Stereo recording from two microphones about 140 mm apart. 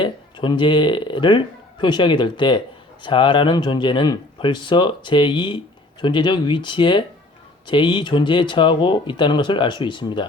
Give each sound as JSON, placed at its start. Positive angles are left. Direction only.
{"t": 0.0, "sound": "speech", "side_deg": 35}